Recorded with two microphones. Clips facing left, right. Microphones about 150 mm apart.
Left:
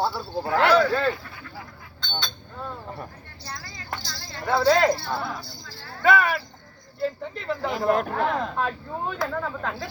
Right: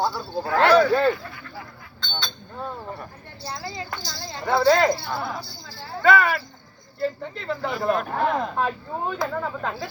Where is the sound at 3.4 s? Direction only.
25° right (ahead or behind).